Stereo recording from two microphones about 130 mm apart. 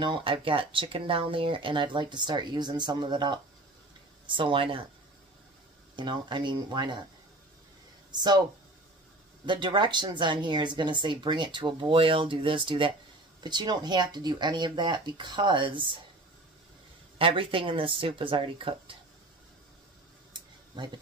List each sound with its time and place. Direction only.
0.0 s speech: 40° right (ahead or behind)
5.9 s speech: 35° right (ahead or behind)
9.5 s speech: 35° right (ahead or behind)
17.2 s speech: 45° right (ahead or behind)
20.3 s a sound: 35° right (ahead or behind)